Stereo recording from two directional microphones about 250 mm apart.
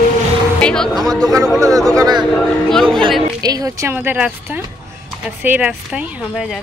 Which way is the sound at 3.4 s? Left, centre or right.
Centre.